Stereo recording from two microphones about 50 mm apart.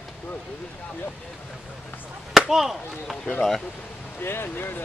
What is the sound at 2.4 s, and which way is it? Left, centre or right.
Speech, centre.